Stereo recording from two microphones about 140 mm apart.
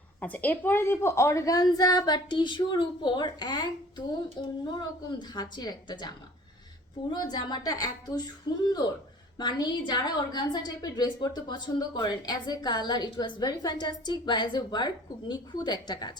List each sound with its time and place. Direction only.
0.2 s a woman's voice: 10° left (ahead or behind); by 8.3 s 30° left (ahead or behind)
9.4 s a woman's voice: 30° left (ahead or behind)